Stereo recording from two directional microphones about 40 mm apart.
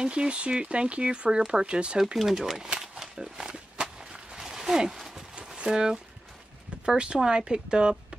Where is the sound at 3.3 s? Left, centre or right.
Right.